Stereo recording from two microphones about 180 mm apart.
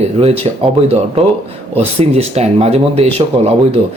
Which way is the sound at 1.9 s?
35° right (ahead or behind).